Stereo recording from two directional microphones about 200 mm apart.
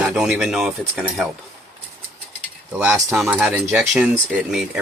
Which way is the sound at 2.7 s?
10° right (ahead or behind).